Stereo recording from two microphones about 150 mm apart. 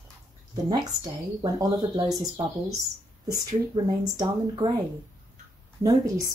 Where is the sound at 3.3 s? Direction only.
30° right (ahead or behind).